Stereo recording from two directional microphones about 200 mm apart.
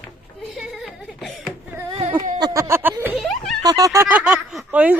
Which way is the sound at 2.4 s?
15° right (ahead or behind).